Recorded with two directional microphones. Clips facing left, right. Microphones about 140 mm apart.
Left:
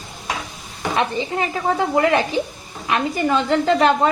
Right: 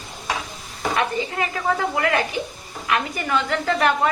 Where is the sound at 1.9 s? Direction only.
25° left (ahead or behind).